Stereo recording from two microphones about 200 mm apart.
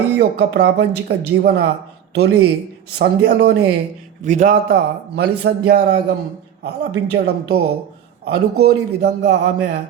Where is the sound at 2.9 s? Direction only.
55° right (ahead or behind).